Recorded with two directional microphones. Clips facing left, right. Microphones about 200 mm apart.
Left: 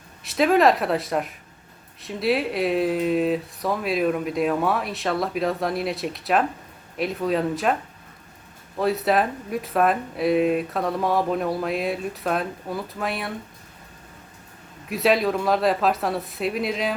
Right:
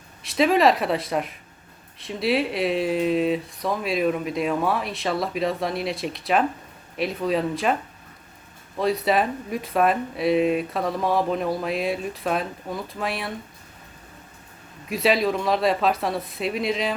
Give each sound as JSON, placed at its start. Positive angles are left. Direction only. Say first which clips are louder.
{"t": 0.2, "sound": "speech", "louder": "left 1 dB", "side_deg": 0}
{"t": 8.8, "sound": "speech", "louder": "even", "side_deg": 0}
{"t": 14.8, "sound": "speech", "louder": "left 1 dB", "side_deg": 0}